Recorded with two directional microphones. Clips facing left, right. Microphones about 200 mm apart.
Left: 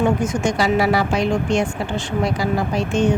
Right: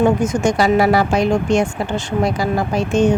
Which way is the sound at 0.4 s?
45° right (ahead or behind).